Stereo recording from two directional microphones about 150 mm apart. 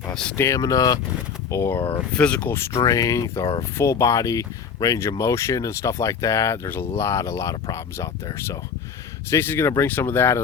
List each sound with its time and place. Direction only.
0.1 s speech: 5° left (ahead or behind)
0.3 s speech: 20° left (ahead or behind)
2.8 s speech: 20° left (ahead or behind)